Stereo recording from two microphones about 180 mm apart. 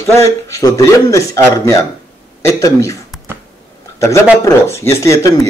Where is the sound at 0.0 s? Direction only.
15° left (ahead or behind).